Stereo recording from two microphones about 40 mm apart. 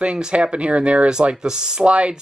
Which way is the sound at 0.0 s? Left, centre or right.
Right.